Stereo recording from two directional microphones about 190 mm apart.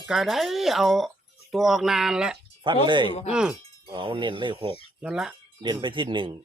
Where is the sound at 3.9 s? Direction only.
25° right (ahead or behind).